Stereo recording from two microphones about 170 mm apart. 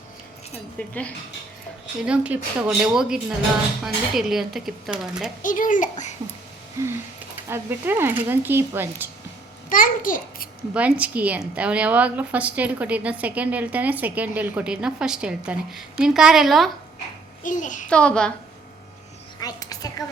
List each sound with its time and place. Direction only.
0.8 s speech: 10° left (ahead or behind)
2.0 s speech: 5° right (ahead or behind)
5.4 s a child's voice: 50° left (ahead or behind)
6.8 s a woman's voice: 15° right (ahead or behind)
9.6 s a child's voice: 55° left (ahead or behind)
10.8 s a woman's voice: 10° right (ahead or behind)
17.4 s a child's voice: 50° left (ahead or behind)
17.8 s speech: 5° left (ahead or behind)
19.4 s a sound: 20° left (ahead or behind)